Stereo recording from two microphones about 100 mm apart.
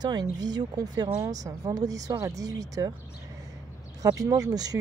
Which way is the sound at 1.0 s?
25° right (ahead or behind).